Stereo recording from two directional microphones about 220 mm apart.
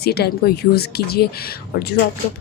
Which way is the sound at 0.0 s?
45° left (ahead or behind).